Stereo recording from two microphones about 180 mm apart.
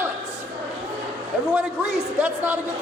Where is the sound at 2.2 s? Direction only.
10° right (ahead or behind).